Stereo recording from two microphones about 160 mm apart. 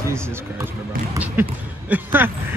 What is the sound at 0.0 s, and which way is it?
Speech, 15° right (ahead or behind).